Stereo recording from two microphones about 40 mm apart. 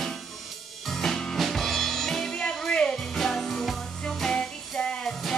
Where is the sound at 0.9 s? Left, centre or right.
Centre.